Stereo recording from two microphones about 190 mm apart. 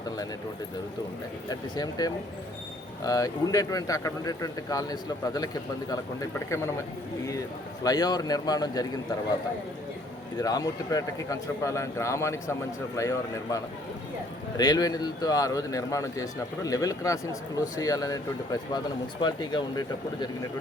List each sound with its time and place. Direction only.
1.5 s a man's voice: 20° left (ahead or behind)
7.9 s a man's voice: 20° left (ahead or behind)
10.4 s a man's voice: 20° left (ahead or behind)